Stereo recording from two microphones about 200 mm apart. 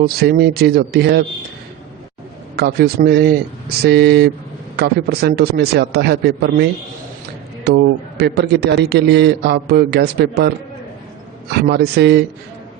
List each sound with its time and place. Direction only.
0.0 s a man's voice: 50° right (ahead or behind)
2.6 s a man's voice: 50° right (ahead or behind)
7.7 s a man's voice: 55° right (ahead or behind)
11.5 s a man's voice: 55° right (ahead or behind)